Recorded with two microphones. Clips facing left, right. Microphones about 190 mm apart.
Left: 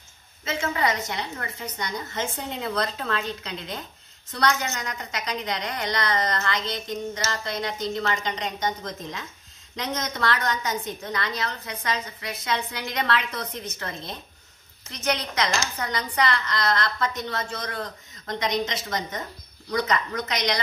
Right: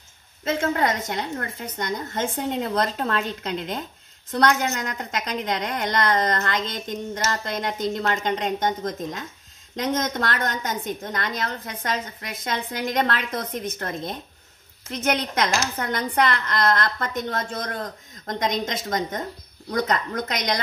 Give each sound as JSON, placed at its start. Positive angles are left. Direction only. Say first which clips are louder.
{"t": 0.5, "sound": "a woman's voice", "louder": "right 3 dB", "side_deg": -50}